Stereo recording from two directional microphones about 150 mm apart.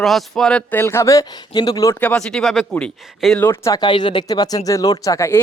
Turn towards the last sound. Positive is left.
turn(degrees=20)  # may be behind; listen again after turning